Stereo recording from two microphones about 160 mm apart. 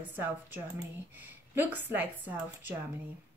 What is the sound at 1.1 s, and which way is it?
A woman's voice, 10° right (ahead or behind).